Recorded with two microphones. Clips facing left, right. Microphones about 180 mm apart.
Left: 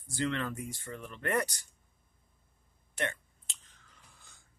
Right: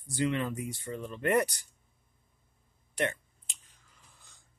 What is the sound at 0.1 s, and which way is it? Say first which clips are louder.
Speech: right 3 dB; 15° right (ahead or behind).